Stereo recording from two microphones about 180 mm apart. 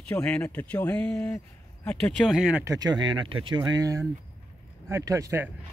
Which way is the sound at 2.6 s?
20° right (ahead or behind).